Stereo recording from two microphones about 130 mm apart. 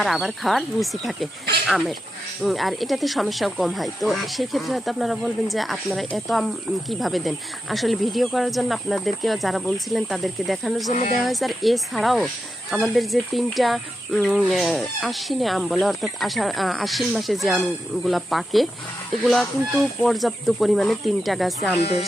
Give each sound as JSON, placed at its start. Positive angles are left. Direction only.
{"t": 0.0, "sound": "speech", "side_deg": 0}
{"t": 21.8, "sound": "speech", "side_deg": 55}